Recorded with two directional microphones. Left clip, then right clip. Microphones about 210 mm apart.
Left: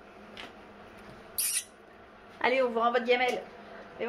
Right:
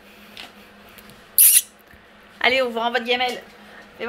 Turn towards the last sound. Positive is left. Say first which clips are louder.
# right 5 dB
turn(degrees=5)  # may be behind; listen again after turning